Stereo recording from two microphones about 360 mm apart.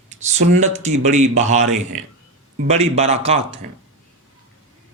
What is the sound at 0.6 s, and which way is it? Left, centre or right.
Speech, centre.